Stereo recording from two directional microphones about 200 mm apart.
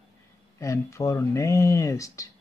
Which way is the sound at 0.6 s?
15° left (ahead or behind).